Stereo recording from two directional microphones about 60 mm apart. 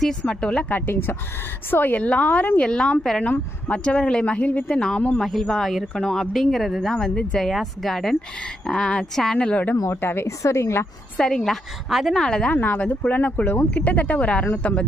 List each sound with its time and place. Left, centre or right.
0.0 s speech: centre
0.7 s speech: left
2.6 s speech: centre
4.8 s speech: centre
9.5 s speech: left
9.9 s speech: left
10.4 s speech: left
11.2 s speech: centre
11.9 s speech: centre
12.1 s speech: centre
12.5 s speech: left